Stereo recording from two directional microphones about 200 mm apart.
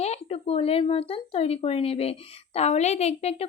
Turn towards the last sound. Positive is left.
turn(degrees=30)  # may be behind; listen again after turning